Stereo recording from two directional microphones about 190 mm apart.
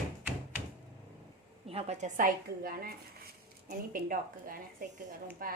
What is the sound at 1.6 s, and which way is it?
Speech, 35° right (ahead or behind).